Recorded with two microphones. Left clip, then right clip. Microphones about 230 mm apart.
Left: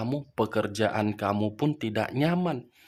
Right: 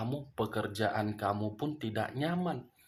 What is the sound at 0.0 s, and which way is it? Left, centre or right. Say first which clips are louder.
Speech: left 7 dB; left.